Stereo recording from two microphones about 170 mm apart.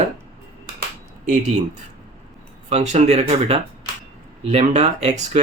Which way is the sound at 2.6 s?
40° right (ahead or behind).